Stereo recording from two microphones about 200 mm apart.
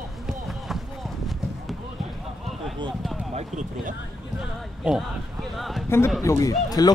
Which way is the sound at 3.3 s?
35° right (ahead or behind).